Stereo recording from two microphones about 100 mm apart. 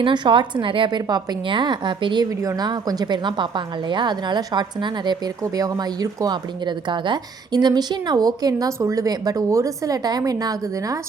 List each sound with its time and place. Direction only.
0.0 s a woman's voice: 50° right (ahead or behind)
2.4 s a woman's voice: 40° right (ahead or behind)
5.4 s speech: 35° right (ahead or behind)